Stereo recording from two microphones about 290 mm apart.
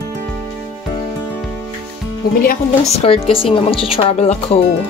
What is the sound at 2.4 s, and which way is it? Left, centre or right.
A woman's voice, left.